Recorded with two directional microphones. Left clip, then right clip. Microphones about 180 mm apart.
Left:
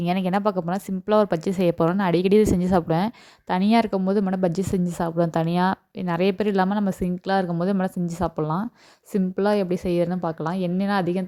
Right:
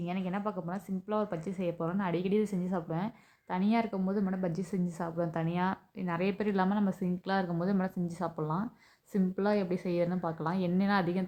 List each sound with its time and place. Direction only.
0.0 s a woman's voice: 55° left (ahead or behind); by 11.3 s 40° left (ahead or behind)